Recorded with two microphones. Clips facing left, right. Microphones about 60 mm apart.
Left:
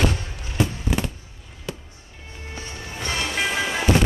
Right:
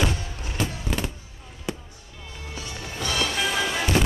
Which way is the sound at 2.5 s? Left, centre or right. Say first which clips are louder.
Even; left.